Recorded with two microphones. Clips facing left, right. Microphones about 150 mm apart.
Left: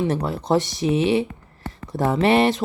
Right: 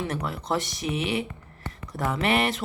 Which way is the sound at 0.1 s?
25° left (ahead or behind).